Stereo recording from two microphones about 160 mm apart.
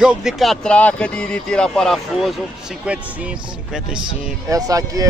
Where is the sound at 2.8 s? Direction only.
5° right (ahead or behind).